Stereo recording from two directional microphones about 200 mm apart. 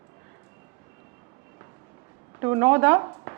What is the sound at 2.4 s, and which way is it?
Speech, 15° right (ahead or behind).